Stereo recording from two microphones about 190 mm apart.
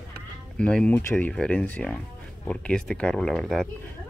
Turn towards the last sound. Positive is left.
turn(degrees=0)  # may be behind; listen again after turning